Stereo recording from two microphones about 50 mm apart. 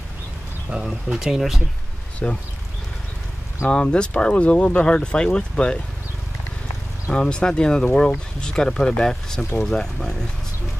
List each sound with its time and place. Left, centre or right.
0.8 s speech: centre
2.2 s speech: left
3.7 s speech: left
7.1 s speech: centre